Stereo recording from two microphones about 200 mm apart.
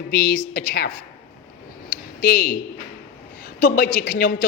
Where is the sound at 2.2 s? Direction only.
50° left (ahead or behind).